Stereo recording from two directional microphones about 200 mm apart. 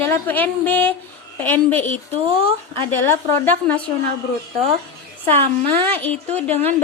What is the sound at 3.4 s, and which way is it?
Speech, 10° left (ahead or behind).